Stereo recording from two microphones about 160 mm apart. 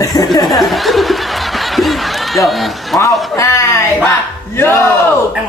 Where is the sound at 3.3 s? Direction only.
20° left (ahead or behind).